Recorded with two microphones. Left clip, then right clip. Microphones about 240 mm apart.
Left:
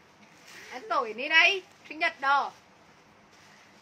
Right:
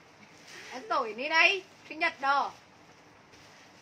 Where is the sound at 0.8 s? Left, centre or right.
Left.